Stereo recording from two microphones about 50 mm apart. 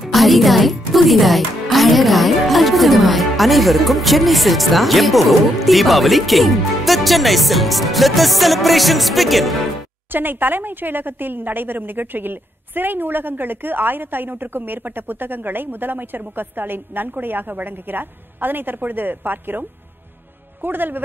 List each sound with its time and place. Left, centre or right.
0.0 s speech: centre
10.1 s a woman's voice: right
20.6 s a woman's voice: right